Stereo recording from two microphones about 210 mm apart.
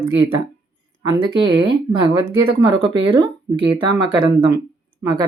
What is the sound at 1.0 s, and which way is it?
Speech, 20° right (ahead or behind).